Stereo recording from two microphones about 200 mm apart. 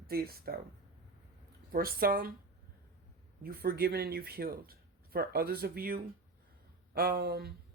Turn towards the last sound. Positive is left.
turn(degrees=-50)  # may be behind; listen again after turning